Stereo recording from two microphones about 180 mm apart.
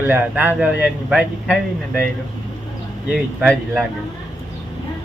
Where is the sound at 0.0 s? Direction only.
10° right (ahead or behind).